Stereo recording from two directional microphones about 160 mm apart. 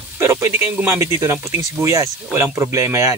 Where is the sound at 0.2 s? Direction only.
15° right (ahead or behind).